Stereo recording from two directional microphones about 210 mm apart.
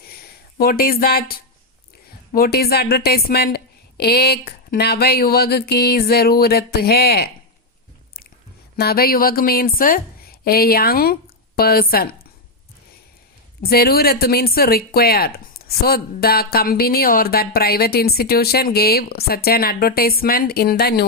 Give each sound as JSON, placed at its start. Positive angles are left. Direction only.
{"t": 0.1, "sound": "a sound", "side_deg": 45}
{"t": 2.3, "sound": "speech", "side_deg": 45}
{"t": 8.7, "sound": "a woman's voice", "side_deg": 45}
{"t": 13.6, "sound": "speech", "side_deg": 45}